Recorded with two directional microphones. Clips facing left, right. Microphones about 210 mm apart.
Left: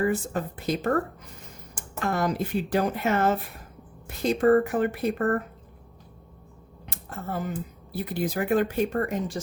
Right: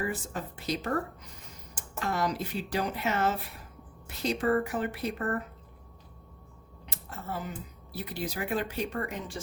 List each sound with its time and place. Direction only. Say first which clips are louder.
0.0 s speech: left 8 dB; 50° left (ahead or behind)
6.8 s a sound: left 4 dB; 50° left (ahead or behind)
7.9 s speech: left 7 dB; 50° left (ahead or behind)